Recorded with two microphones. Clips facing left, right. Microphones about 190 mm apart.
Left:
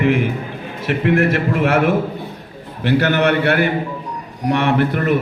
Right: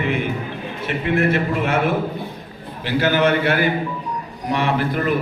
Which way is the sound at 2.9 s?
65° left (ahead or behind).